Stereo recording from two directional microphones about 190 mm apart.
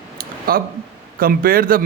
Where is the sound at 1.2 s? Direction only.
50° right (ahead or behind).